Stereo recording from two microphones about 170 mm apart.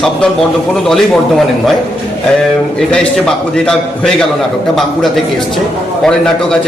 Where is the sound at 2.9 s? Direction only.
5° left (ahead or behind).